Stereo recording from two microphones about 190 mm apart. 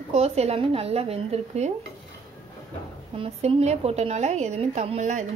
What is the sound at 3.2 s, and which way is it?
A woman's voice, 35° right (ahead or behind).